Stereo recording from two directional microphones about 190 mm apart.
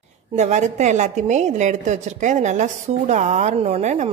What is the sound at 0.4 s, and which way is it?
A woman's voice, 35° right (ahead or behind).